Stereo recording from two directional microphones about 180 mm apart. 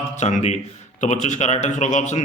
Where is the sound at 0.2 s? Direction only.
40° left (ahead or behind).